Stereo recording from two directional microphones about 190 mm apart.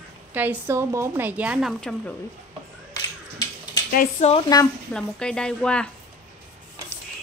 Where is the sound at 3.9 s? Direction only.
50° left (ahead or behind).